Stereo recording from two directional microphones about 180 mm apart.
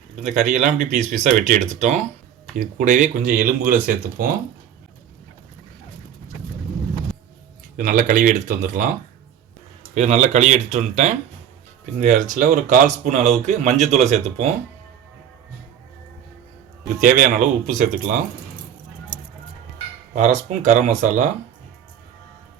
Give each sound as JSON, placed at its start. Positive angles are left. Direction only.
{"t": 0.2, "sound": "speech", "side_deg": -45}
{"t": 7.8, "sound": "speech", "side_deg": -50}
{"t": 9.9, "sound": "speech", "side_deg": -40}
{"t": 17.0, "sound": "speech", "side_deg": -45}
{"t": 20.1, "sound": "speech", "side_deg": -40}